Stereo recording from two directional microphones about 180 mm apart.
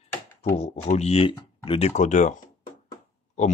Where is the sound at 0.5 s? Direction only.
35° left (ahead or behind).